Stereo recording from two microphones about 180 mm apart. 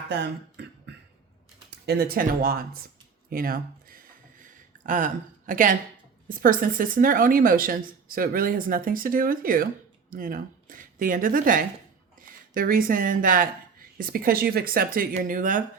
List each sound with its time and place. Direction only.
0.1 s throat clearing: 70° right (ahead or behind)
1.7 s speech: 60° right (ahead or behind)
3.2 s a sound: 55° right (ahead or behind)
6.2 s speech: 50° right (ahead or behind)